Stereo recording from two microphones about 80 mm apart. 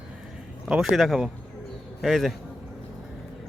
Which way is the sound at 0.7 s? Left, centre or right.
Centre.